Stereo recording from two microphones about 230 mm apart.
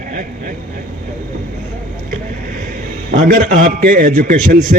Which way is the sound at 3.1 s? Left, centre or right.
Right.